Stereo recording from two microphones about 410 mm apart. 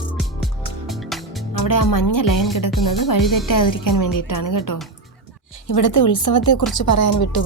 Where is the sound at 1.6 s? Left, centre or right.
Left.